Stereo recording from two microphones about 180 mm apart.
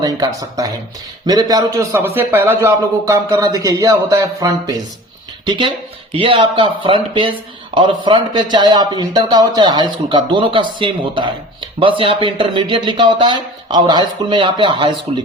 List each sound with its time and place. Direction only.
0.0 s speech: 20° right (ahead or behind)
6.1 s speech: 30° right (ahead or behind)